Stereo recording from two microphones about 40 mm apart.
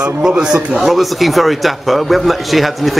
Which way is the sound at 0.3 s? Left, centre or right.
Right.